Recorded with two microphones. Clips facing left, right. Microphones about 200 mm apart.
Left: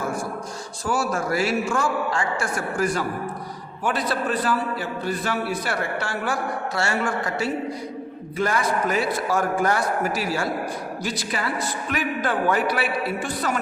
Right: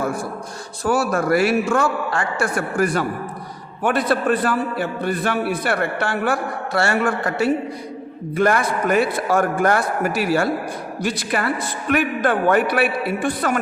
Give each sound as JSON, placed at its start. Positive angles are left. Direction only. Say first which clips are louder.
{"t": 0.9, "sound": "a man's voice", "louder": "right 6 dB", "side_deg": -60}